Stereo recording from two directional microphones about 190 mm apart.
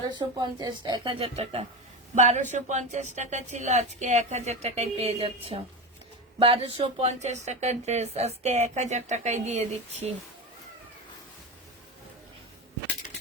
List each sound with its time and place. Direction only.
0.1 s a woman's voice: 20° right (ahead or behind)